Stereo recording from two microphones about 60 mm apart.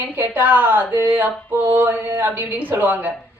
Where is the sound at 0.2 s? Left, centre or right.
Right.